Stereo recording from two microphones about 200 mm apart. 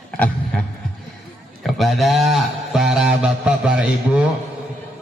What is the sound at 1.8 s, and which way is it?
A man's voice, centre (ahead or behind).